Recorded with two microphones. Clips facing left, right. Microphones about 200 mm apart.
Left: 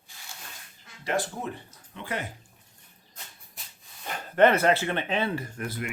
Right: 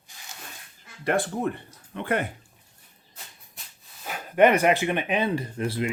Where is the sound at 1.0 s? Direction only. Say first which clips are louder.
Right 5 dB; 55° right (ahead or behind).